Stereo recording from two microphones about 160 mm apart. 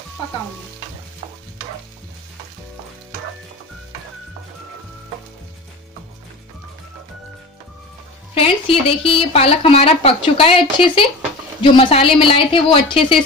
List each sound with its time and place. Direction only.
8.4 s speech: 35° left (ahead or behind)